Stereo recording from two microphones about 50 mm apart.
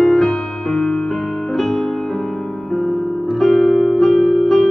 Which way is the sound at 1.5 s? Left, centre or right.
Centre.